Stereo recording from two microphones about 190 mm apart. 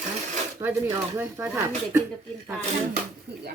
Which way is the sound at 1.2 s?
15° right (ahead or behind).